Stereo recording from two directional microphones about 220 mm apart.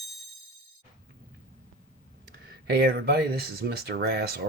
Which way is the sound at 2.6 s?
45° right (ahead or behind).